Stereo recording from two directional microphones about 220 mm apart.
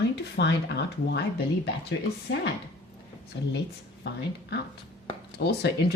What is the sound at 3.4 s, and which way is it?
Speech, 55° left (ahead or behind).